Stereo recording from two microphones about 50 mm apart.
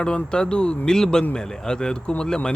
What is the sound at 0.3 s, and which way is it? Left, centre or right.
Speech, centre.